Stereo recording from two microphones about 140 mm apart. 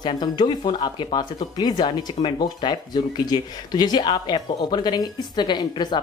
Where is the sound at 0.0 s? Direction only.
30° left (ahead or behind).